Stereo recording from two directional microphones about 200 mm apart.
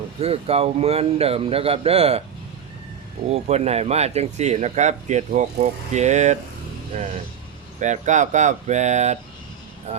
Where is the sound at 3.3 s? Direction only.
35° right (ahead or behind).